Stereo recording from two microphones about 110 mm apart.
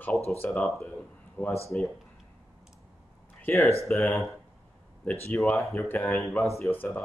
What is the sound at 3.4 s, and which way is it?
Speech, 20° left (ahead or behind).